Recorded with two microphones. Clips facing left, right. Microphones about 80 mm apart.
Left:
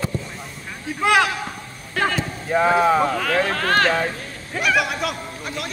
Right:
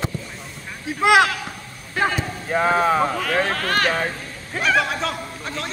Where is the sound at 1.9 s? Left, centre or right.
Centre.